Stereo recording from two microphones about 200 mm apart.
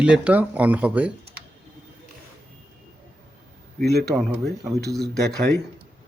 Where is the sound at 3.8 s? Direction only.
55° right (ahead or behind).